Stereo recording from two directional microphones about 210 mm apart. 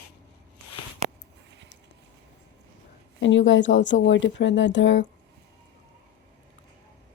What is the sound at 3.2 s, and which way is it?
Speech, 60° left (ahead or behind).